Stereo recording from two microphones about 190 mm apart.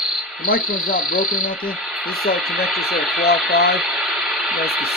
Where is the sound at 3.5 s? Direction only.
55° left (ahead or behind).